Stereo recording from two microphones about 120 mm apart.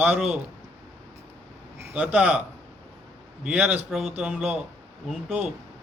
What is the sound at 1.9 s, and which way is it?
Speech, 10° right (ahead or behind).